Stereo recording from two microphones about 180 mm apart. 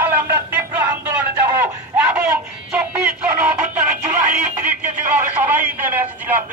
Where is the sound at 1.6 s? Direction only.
15° right (ahead or behind).